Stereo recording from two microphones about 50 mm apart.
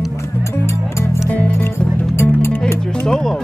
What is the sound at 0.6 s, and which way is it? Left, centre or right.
Music, left.